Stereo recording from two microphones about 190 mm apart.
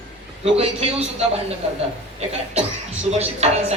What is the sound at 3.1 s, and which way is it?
Speech, 35° right (ahead or behind).